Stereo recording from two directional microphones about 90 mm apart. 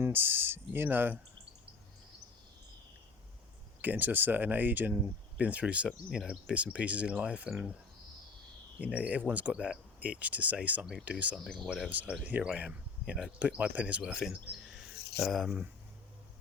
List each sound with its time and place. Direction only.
0.0 s speech: 25° right (ahead or behind)
3.8 s speech: 20° right (ahead or behind)
8.8 s speech: 15° right (ahead or behind)
11.3 s speech: 5° left (ahead or behind)
11.9 s speech: 15° right (ahead or behind)